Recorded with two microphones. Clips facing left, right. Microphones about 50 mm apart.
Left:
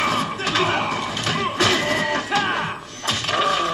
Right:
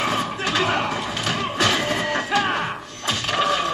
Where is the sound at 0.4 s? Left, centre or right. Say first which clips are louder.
Right 1 dB; centre.